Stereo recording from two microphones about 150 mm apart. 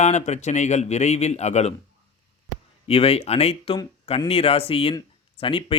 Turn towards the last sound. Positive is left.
turn(degrees=35)  # may be behind; listen again after turning